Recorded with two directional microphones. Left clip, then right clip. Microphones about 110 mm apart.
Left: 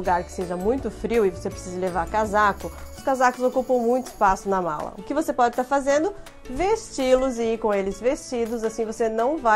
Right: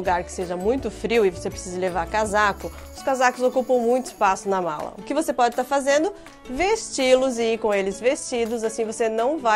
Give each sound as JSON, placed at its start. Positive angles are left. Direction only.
{"t": 0.0, "sound": "a woman's voice", "side_deg": -20}